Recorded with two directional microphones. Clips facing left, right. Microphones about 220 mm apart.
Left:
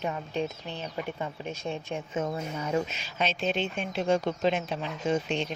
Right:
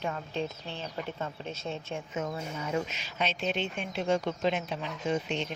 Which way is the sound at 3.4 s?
35° left (ahead or behind).